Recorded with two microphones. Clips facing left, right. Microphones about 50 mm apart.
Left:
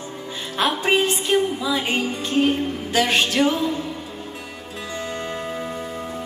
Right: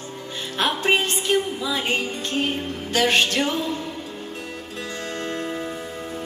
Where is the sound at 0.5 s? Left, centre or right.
Centre.